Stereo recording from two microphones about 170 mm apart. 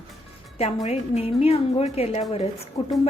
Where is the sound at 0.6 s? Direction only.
40° left (ahead or behind).